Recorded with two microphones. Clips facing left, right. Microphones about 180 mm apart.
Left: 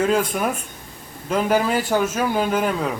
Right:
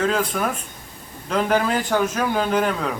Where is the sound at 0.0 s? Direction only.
10° left (ahead or behind).